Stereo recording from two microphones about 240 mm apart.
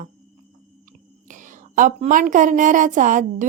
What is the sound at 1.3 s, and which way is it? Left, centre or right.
A woman's voice, right.